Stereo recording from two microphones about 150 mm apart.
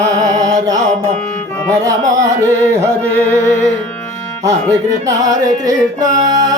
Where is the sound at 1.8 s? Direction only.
25° right (ahead or behind).